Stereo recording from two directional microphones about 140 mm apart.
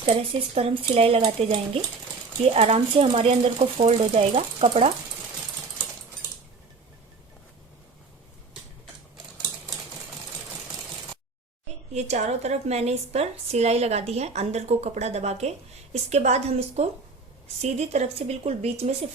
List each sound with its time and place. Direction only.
0.1 s a woman's voice: 45° right (ahead or behind)
11.9 s a woman's voice: 55° right (ahead or behind)